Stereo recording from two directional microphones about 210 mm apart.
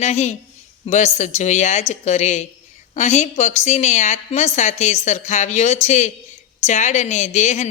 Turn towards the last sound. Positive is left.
turn(degrees=35)  # may be behind; listen again after turning